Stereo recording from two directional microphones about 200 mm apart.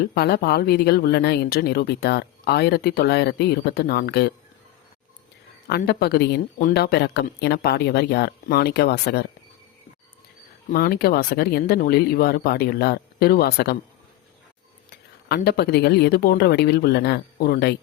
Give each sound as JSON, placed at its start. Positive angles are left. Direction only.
{"t": 0.0, "sound": "speech", "side_deg": 50}
{"t": 5.6, "sound": "speech", "side_deg": 55}
{"t": 10.7, "sound": "speech", "side_deg": 50}
{"t": 15.4, "sound": "speech", "side_deg": 50}